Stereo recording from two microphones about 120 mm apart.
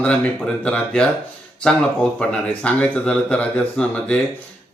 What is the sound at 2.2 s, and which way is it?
Speech, 10° left (ahead or behind).